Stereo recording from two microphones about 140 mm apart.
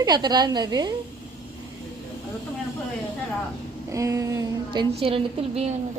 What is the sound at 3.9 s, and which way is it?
Female singing, 20° right (ahead or behind).